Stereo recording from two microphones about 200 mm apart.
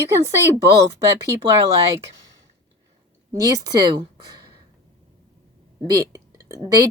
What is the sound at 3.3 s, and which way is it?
Speech, 15° right (ahead or behind).